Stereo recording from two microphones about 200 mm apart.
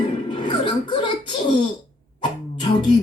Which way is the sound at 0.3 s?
25° left (ahead or behind).